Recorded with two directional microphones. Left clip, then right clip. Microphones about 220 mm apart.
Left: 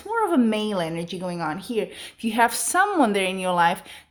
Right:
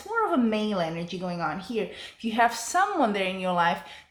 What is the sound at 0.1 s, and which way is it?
Speech, 50° left (ahead or behind).